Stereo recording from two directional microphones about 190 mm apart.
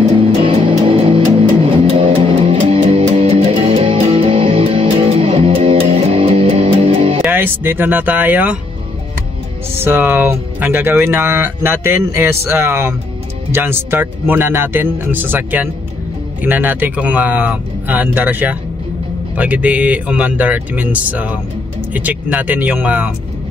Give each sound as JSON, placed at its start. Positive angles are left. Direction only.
{"t": 0.2, "sound": "music", "side_deg": -30}
{"t": 7.2, "sound": "speech", "side_deg": -10}
{"t": 9.8, "sound": "speech", "side_deg": -10}